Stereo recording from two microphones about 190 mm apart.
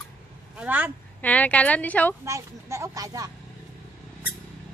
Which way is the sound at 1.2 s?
5° left (ahead or behind).